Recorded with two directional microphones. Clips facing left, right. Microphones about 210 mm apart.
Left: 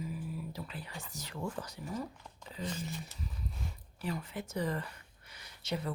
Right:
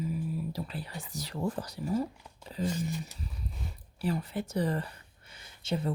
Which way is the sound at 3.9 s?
35° right (ahead or behind).